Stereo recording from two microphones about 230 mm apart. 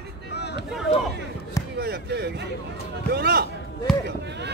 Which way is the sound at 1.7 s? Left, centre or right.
Right.